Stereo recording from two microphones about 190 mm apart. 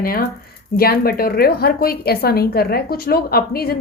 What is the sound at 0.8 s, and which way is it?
A woman's voice, 50° left (ahead or behind).